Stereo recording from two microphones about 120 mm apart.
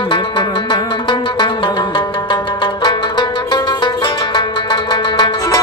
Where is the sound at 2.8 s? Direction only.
40° left (ahead or behind).